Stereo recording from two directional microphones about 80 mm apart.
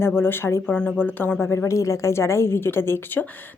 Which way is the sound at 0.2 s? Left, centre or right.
Left.